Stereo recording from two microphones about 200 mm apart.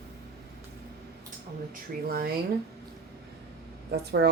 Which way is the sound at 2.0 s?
50° right (ahead or behind).